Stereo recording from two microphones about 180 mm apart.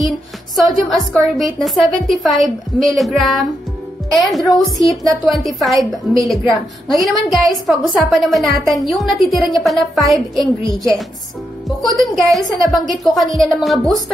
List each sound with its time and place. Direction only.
0.6 s a woman's voice: centre (ahead or behind)
11.8 s a woman's voice: centre (ahead or behind)